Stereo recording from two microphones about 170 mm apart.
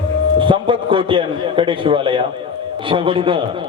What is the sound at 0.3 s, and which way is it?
A man's voice, 30° right (ahead or behind).